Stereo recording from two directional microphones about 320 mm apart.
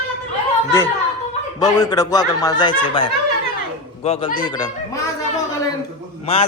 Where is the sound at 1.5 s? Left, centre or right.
Centre.